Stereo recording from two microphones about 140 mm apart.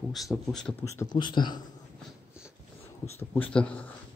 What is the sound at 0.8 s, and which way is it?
Speech, 20° left (ahead or behind).